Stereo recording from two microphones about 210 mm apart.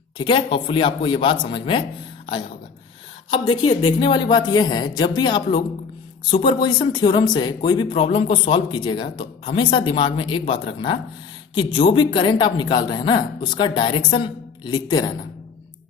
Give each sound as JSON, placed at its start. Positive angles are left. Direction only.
{"t": 0.2, "sound": "speech", "side_deg": 25}
{"t": 3.2, "sound": "speech", "side_deg": 25}